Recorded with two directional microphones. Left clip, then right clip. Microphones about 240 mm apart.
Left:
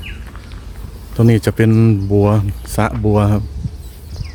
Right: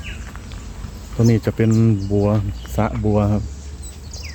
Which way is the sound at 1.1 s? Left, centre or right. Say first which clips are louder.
Left 4 dB; left.